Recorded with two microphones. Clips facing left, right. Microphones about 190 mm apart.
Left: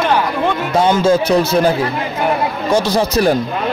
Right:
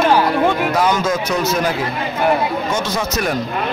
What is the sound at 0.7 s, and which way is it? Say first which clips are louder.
A man's voice: left 5 dB; 30° left (ahead or behind).